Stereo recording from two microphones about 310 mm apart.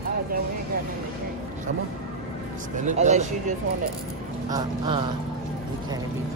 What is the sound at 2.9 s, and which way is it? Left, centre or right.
Speech, right.